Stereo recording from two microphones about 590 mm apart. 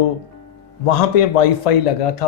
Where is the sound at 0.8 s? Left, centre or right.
Left.